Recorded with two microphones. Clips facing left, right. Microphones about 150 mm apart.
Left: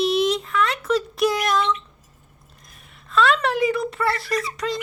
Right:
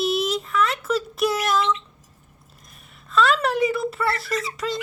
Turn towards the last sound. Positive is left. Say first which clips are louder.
# left 1 dB
turn(degrees=0)  # may be behind; listen again after turning